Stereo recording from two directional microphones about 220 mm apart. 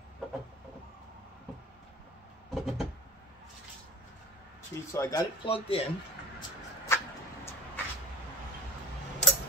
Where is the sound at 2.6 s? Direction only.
Centre (ahead or behind).